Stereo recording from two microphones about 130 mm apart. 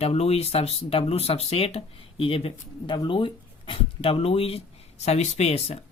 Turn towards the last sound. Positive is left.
turn(degrees=55)  # may be behind; listen again after turning